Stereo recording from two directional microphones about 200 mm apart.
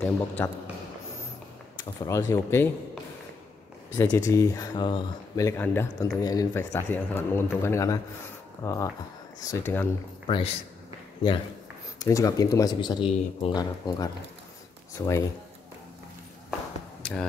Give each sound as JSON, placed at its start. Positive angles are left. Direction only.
{"t": 0.4, "sound": "speech", "side_deg": 10}
{"t": 2.0, "sound": "speech", "side_deg": 15}
{"t": 10.2, "sound": "speech", "side_deg": 25}
{"t": 12.0, "sound": "speech", "side_deg": 15}
{"t": 17.0, "sound": "speech", "side_deg": 5}